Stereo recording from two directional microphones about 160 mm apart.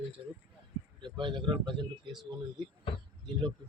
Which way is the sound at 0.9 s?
30° right (ahead or behind).